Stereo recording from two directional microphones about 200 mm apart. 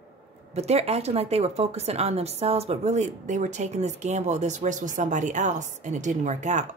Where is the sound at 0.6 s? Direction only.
30° right (ahead or behind).